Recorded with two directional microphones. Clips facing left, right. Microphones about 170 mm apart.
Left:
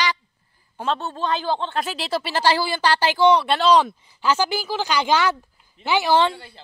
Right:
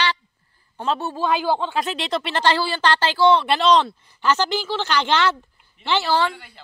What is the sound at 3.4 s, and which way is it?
A woman's voice, 5° left (ahead or behind).